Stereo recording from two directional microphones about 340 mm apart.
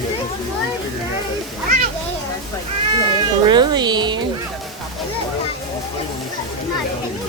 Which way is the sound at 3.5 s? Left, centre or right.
Centre.